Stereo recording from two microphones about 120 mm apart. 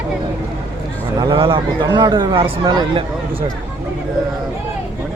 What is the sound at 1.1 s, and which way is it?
Speech, 40° right (ahead or behind).